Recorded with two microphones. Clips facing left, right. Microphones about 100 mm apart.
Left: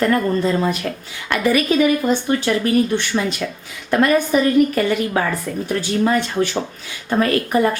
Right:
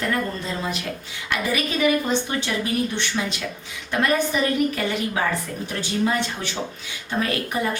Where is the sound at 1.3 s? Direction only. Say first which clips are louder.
Left 8 dB; 50° left (ahead or behind).